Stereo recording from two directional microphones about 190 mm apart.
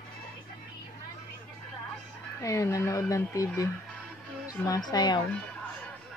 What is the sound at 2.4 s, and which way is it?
Speech, 15° left (ahead or behind).